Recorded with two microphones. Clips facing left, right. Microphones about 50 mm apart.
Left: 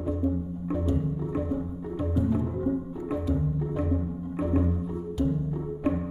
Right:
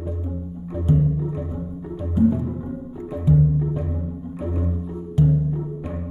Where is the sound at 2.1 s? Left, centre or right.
Centre.